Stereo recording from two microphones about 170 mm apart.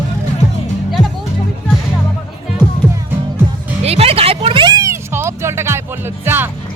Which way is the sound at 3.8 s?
35° right (ahead or behind).